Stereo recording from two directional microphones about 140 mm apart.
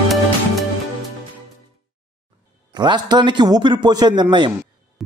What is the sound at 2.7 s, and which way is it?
Speech, 30° right (ahead or behind).